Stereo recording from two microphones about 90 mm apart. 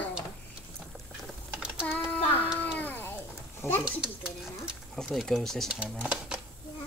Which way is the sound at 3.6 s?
25° left (ahead or behind).